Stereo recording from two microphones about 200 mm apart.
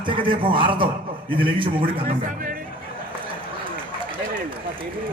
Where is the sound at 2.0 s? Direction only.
40° right (ahead or behind).